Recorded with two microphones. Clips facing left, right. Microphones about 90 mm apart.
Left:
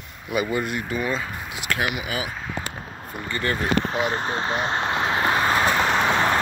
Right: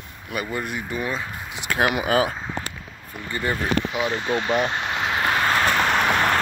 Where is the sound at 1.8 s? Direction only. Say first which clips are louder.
Right 9 dB; 40° right (ahead or behind).